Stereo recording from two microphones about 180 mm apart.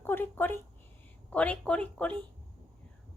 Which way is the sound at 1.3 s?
5° left (ahead or behind).